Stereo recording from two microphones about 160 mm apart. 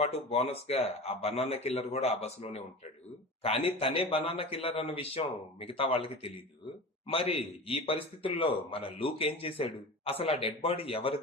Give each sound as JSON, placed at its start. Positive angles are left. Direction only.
{"t": 0.0, "sound": "a man's voice", "side_deg": 40}
{"t": 7.1, "sound": "a man's voice", "side_deg": 35}